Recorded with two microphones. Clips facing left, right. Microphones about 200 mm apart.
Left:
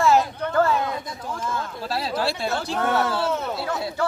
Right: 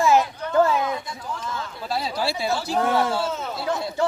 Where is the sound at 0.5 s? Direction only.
15° right (ahead or behind).